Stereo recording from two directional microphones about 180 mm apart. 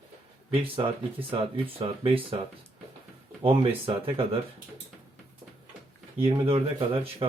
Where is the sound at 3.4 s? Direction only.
30° right (ahead or behind).